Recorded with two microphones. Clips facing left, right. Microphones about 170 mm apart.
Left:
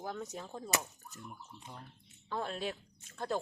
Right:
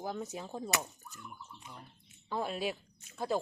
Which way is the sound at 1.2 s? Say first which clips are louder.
Even; 30° left (ahead or behind).